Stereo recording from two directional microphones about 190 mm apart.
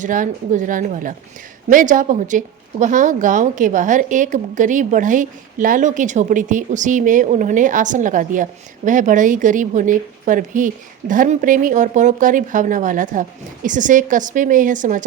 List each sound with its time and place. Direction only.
0.0 s speech: 45° right (ahead or behind)